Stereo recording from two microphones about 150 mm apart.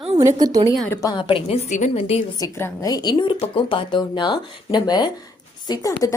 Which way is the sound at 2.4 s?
20° left (ahead or behind).